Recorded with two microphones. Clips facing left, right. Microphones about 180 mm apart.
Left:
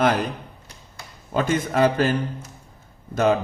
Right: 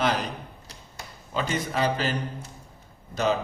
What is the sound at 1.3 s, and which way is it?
A man's voice, 50° left (ahead or behind).